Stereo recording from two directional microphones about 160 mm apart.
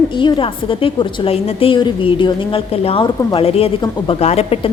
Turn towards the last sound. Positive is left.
turn(degrees=40)  # may be behind; listen again after turning